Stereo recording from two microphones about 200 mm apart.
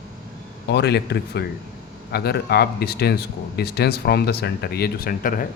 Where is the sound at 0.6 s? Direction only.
55° left (ahead or behind).